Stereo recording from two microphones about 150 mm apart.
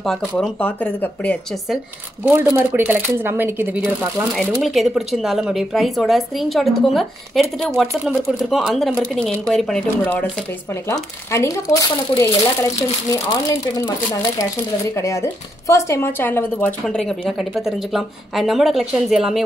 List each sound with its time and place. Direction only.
0.4 s speech: 10° left (ahead or behind)
2.2 s speech: 15° right (ahead or behind)
4.6 s a woman's voice: centre (ahead or behind)
10.7 s speech: 20° left (ahead or behind)
15.0 s a woman's voice: 20° left (ahead or behind); by 19.4 s 5° right (ahead or behind)